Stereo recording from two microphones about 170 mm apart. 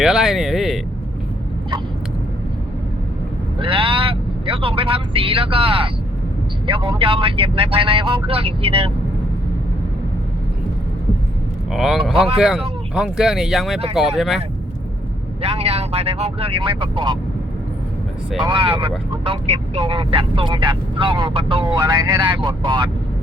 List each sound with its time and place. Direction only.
0.0 s speech: 5° right (ahead or behind)
3.6 s speech: 30° right (ahead or behind)
11.7 s speech: centre (ahead or behind)
12.1 s speech: 35° right (ahead or behind)
12.4 s speech: 5° right (ahead or behind)
15.4 s speech: 35° right (ahead or behind)
18.4 s speech: 30° right (ahead or behind)